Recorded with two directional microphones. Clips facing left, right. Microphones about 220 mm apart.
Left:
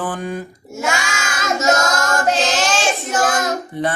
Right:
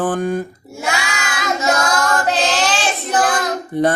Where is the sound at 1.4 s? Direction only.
45° left (ahead or behind).